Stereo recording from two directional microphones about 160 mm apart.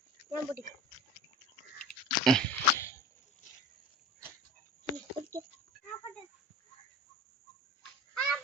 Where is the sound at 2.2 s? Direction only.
5° left (ahead or behind).